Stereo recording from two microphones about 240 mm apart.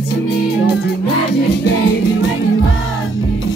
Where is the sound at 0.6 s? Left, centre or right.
Left.